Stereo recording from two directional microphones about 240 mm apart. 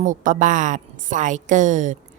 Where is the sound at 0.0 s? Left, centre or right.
Right.